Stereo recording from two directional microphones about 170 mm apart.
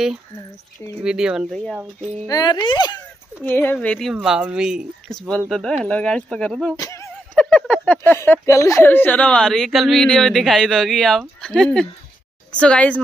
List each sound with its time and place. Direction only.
1.0 s speech: 5° right (ahead or behind)
2.2 s speech: 25° left (ahead or behind)
3.4 s speech: 10° left (ahead or behind)
6.8 s speech: 20° left (ahead or behind)
7.3 s a woman's voice: 5° left (ahead or behind)